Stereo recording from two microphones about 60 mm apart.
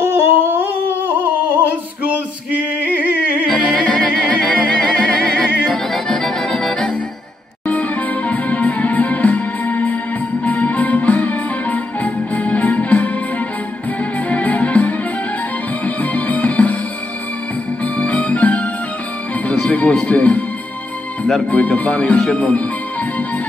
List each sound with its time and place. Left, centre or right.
0.0 s humming: right
2.9 s music: right
3.4 s music: centre
7.6 s music: left
14.3 s music: left
17.8 s music: left
19.7 s music: left
21.5 s speech: left